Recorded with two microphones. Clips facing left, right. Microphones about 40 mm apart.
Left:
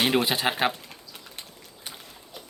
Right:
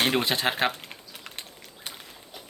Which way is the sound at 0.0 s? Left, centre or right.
Centre.